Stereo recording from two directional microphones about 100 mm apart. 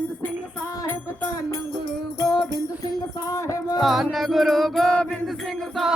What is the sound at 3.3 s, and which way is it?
Music, 30° left (ahead or behind).